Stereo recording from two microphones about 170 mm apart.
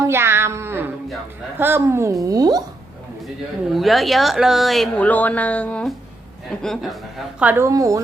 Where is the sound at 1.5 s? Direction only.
15° right (ahead or behind).